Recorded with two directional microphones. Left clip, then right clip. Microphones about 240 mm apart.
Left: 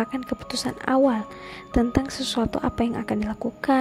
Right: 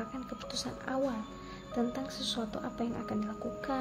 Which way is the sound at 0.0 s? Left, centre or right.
Left.